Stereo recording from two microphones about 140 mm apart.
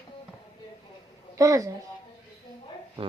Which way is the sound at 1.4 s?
20° right (ahead or behind).